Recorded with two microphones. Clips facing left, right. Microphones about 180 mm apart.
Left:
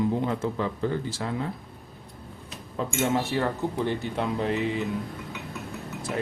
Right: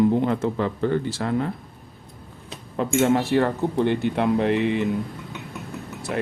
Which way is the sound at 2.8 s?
65° right (ahead or behind).